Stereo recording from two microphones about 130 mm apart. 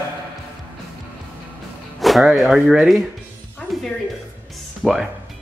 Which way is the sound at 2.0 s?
Centre (ahead or behind).